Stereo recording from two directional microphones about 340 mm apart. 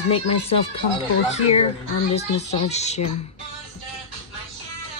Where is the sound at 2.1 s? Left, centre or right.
Centre.